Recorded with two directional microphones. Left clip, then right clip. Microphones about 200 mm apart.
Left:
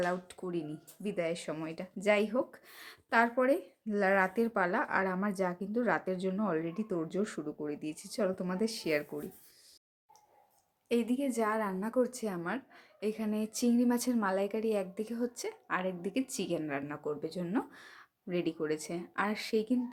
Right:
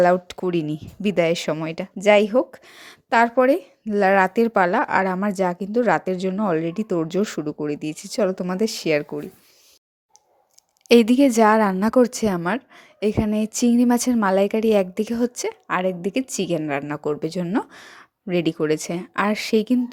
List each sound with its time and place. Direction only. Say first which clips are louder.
0.0 s speech: right 17 dB; 40° right (ahead or behind)
10.8 s speech: right 17 dB; 45° right (ahead or behind)